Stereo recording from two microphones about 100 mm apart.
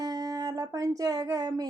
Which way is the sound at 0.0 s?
40° right (ahead or behind).